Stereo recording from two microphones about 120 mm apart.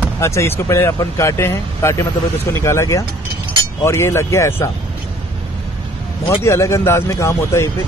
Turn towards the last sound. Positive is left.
turn(degrees=20)  # may be behind; listen again after turning